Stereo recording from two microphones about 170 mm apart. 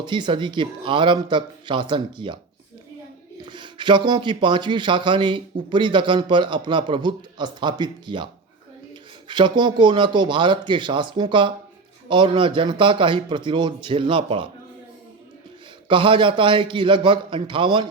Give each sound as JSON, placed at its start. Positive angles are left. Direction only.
{"t": 0.0, "sound": "a man's voice", "side_deg": -25}
{"t": 3.4, "sound": "a man's voice", "side_deg": -25}
{"t": 15.9, "sound": "a man's voice", "side_deg": -30}